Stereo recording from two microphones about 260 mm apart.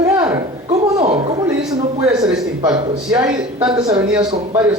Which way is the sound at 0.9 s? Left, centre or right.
Right.